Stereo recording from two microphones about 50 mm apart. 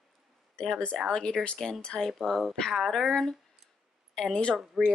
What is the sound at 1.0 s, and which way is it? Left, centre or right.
Child singing, centre.